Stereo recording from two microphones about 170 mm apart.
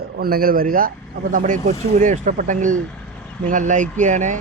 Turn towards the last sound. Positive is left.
turn(degrees=-45)  # may be behind; listen again after turning